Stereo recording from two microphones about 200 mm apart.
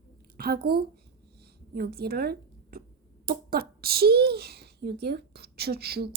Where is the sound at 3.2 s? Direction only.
50° right (ahead or behind).